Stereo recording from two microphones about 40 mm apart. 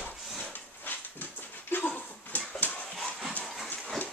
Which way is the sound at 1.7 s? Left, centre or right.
Left.